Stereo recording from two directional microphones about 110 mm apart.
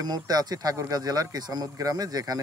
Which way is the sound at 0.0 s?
35° right (ahead or behind).